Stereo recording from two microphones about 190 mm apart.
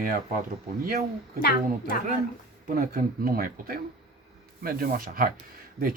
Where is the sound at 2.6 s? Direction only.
45° right (ahead or behind).